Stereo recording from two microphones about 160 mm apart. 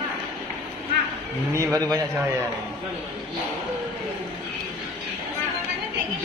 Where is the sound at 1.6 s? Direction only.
20° right (ahead or behind).